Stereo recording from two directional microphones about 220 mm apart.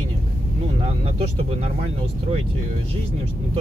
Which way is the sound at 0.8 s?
30° right (ahead or behind).